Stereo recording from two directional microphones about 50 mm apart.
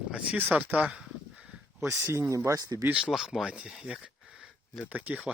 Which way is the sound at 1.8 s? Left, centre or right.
Right.